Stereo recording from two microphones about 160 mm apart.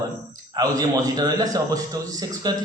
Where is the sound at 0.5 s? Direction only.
20° right (ahead or behind).